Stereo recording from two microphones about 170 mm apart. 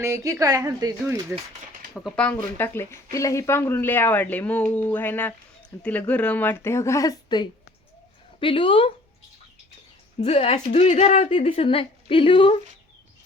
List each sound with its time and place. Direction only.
0.0 s speech: 20° right (ahead or behind)
2.0 s a woman's voice: 5° left (ahead or behind); by 8.9 s 30° left (ahead or behind)
10.2 s a woman's voice: 40° left (ahead or behind)